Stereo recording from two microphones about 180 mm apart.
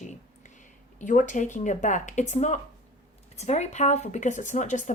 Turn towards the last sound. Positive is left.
turn(degrees=40)  # may be behind; listen again after turning